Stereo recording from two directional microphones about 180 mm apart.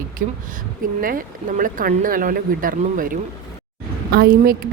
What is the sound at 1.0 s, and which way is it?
A woman's voice, 50° right (ahead or behind).